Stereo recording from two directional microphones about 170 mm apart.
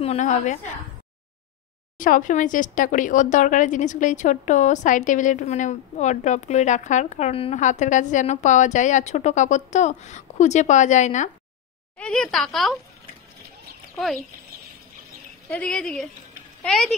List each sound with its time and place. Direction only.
0.0 s speech: 40° left (ahead or behind)
2.0 s speech: 50° left (ahead or behind)
12.0 s speech: 5° left (ahead or behind)
15.5 s speech: 5° left (ahead or behind)